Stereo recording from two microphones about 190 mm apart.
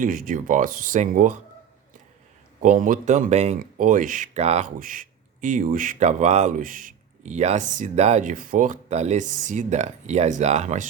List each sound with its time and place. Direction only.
0.0 s speech: 45° right (ahead or behind)
2.6 s speech: 45° right (ahead or behind)